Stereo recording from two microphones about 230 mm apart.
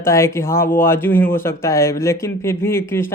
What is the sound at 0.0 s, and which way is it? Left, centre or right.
Speech, centre.